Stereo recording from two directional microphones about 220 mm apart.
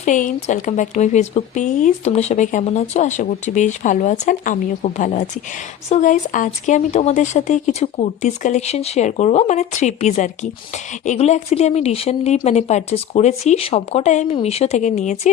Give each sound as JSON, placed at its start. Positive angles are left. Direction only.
{"t": 0.0, "sound": "speech", "side_deg": 35}